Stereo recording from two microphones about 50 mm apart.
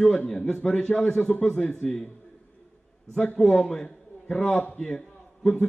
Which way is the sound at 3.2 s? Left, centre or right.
Centre.